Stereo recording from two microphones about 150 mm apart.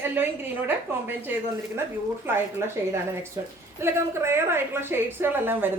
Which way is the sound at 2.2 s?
15° right (ahead or behind).